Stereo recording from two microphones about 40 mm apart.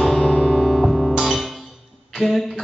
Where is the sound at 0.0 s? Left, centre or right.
Centre.